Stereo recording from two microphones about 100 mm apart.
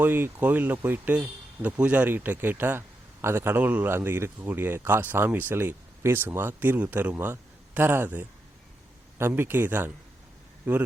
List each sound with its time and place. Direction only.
0.0 s speech: 20° right (ahead or behind)